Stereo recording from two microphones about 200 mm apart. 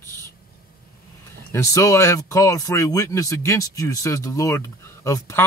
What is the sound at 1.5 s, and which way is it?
Speech, 15° left (ahead or behind).